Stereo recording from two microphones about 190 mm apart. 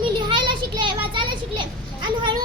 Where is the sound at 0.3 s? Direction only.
25° right (ahead or behind).